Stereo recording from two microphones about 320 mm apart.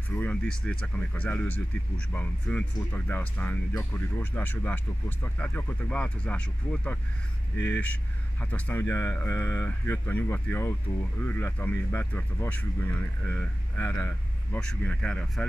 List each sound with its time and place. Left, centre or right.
0.2 s speech: centre
7.5 s speech: left
7.8 s speech: centre